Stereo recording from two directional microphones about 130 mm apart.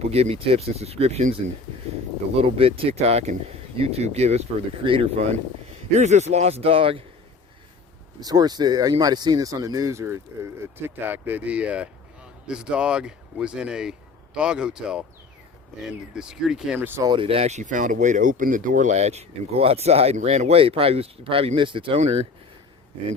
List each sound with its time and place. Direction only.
0.0 s speech: 50° right (ahead or behind)
5.9 s speech: 60° right (ahead or behind); by 7.0 s 45° right (ahead or behind)
8.2 s speech: 30° right (ahead or behind); by 16.7 s 5° right (ahead or behind)
17.0 s speech: 35° right (ahead or behind)
22.0 s speech: 55° right (ahead or behind)